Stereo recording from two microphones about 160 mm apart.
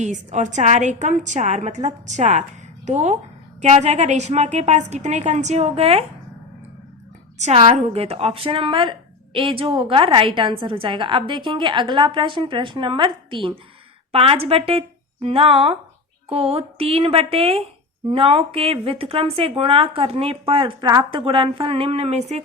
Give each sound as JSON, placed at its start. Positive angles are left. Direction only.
{"t": 0.0, "sound": "a woman's voice", "side_deg": -45}
{"t": 7.3, "sound": "a woman's voice", "side_deg": -45}